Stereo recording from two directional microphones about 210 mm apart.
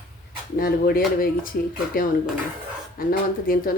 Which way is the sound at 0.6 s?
45° left (ahead or behind).